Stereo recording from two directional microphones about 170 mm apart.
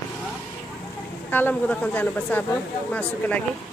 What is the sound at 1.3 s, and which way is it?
Speech, 10° left (ahead or behind).